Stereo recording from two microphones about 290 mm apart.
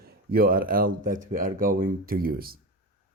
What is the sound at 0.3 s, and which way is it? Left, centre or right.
Speech, right.